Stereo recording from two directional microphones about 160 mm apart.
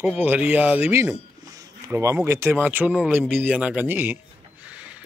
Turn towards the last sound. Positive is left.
turn(degrees=-5)  # may be behind; listen again after turning